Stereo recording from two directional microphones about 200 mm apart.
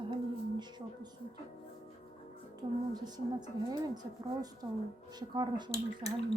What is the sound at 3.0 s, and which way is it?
A woman's voice, 20° right (ahead or behind).